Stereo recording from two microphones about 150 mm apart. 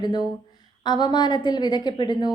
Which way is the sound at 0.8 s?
30° left (ahead or behind).